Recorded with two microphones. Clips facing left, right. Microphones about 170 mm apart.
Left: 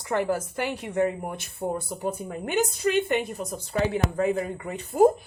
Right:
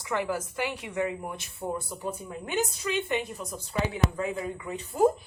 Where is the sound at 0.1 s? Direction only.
50° left (ahead or behind).